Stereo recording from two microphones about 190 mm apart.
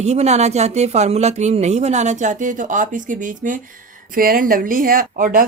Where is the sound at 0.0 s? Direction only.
35° right (ahead or behind).